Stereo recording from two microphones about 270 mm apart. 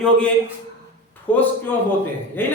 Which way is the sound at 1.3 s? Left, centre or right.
Centre.